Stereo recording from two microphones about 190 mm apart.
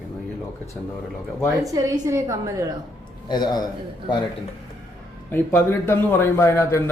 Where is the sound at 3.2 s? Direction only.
20° left (ahead or behind).